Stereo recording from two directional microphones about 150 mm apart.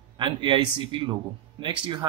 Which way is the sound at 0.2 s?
30° right (ahead or behind).